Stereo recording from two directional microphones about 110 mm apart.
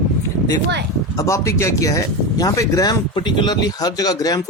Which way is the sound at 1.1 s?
30° left (ahead or behind).